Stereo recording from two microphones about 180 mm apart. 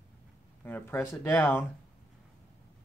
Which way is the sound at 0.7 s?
10° left (ahead or behind).